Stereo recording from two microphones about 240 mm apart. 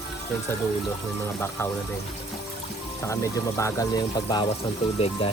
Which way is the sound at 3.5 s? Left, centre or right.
Centre.